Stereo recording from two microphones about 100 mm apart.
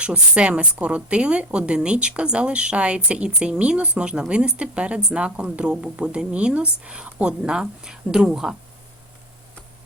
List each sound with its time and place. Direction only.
0.0 s speech: 10° right (ahead or behind)